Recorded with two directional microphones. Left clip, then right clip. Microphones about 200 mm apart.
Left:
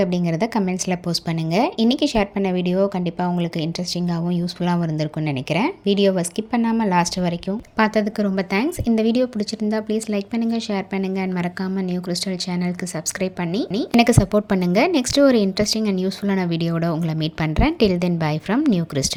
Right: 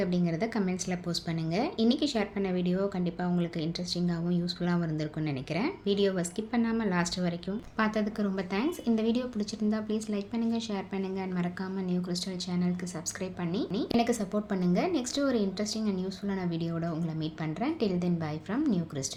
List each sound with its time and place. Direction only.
0.0 s speech: 35° left (ahead or behind)
13.2 s a woman's voice: 40° left (ahead or behind)